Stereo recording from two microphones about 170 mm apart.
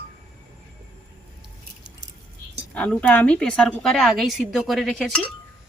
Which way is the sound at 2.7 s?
5° left (ahead or behind).